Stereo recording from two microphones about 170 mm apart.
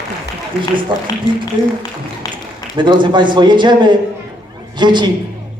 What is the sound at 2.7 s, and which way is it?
A man's voice, 25° right (ahead or behind).